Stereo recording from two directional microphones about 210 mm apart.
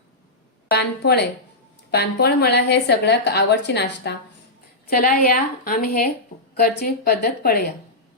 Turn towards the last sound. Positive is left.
turn(degrees=50)  # may be behind; listen again after turning